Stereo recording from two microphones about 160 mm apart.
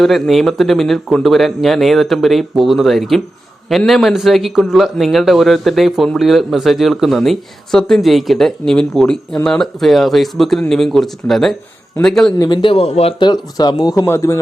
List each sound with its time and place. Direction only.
0.0 s a man's voice: centre (ahead or behind)
12.4 s speech: 30° left (ahead or behind)